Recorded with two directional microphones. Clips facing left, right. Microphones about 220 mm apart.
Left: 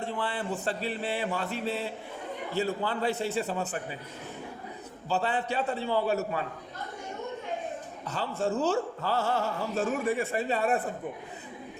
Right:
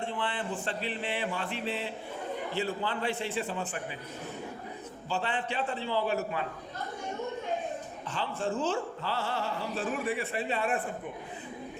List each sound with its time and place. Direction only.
0.0 s speech: 40° left (ahead or behind)
5.0 s speech: 35° left (ahead or behind)
8.0 s speech: 40° left (ahead or behind)